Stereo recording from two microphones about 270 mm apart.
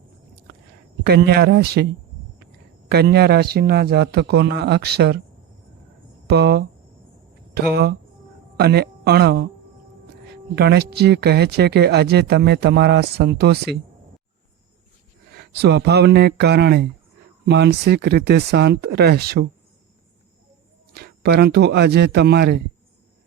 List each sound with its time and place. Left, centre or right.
1.0 s speech: right
2.9 s speech: right
6.2 s speech: right
10.5 s speech: right
15.4 s speech: right
20.9 s speech: right